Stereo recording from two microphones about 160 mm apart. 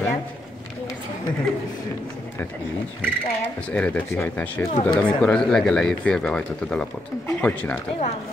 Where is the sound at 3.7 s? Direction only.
10° left (ahead or behind).